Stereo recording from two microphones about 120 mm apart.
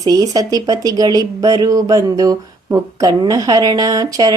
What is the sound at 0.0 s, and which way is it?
Speech, 30° right (ahead or behind).